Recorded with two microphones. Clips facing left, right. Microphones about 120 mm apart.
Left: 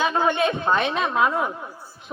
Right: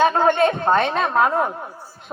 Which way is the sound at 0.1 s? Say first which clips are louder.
Right 4 dB; 40° right (ahead or behind).